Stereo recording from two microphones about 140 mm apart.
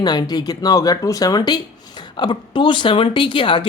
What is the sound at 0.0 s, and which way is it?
Speech, 30° left (ahead or behind).